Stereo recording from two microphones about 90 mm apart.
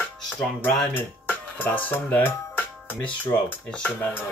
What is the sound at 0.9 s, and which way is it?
Speech, 20° left (ahead or behind).